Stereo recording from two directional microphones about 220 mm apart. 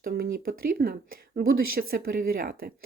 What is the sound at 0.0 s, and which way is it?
Speech, 45° right (ahead or behind).